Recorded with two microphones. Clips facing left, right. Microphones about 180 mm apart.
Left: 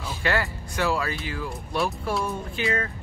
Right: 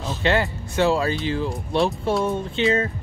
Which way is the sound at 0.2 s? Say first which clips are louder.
Right 5 dB; 25° right (ahead or behind).